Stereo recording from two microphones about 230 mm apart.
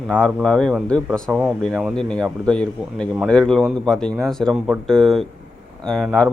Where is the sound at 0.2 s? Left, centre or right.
Centre.